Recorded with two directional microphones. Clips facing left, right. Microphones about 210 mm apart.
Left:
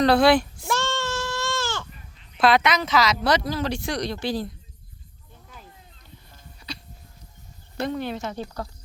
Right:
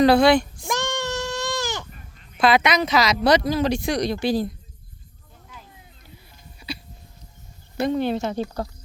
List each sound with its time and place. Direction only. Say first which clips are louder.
0.0 s speech: right 2 dB; centre (ahead or behind)
0.7 s goat: right 1 dB; 15° right (ahead or behind)
2.6 s speech: right 2 dB; 15° right (ahead or behind)
6.6 s a sound: right 5 dB; 10° right (ahead or behind)
7.9 s speech: right 6 dB; 30° right (ahead or behind)